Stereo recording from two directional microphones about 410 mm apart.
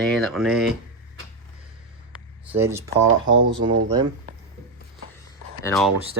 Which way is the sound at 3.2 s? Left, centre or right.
Right.